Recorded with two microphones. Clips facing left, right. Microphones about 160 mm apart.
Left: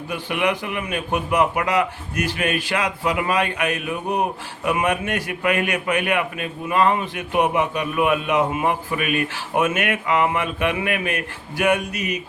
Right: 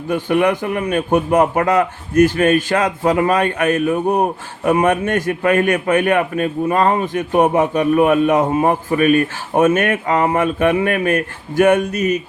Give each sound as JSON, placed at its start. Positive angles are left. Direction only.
{"t": 0.1, "sound": "a man's voice", "side_deg": -45}